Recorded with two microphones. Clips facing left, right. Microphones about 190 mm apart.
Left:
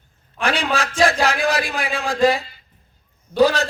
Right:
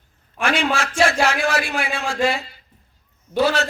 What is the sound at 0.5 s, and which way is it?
Speech, 35° left (ahead or behind).